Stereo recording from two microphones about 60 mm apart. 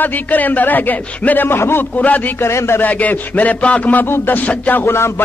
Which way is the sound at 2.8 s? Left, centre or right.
Left.